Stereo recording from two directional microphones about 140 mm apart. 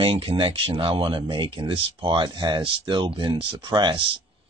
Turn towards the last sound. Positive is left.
turn(degrees=-35)  # may be behind; listen again after turning